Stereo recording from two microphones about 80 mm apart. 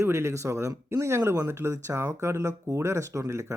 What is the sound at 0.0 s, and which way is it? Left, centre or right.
Speech, right.